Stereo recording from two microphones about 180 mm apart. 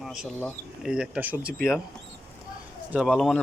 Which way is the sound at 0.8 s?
5° right (ahead or behind).